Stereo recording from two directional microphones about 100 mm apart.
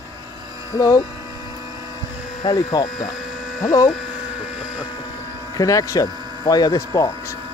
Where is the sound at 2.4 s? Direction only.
35° left (ahead or behind).